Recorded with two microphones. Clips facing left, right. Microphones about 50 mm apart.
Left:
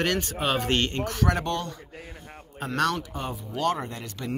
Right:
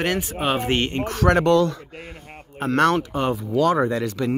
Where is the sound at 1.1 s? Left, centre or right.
Right.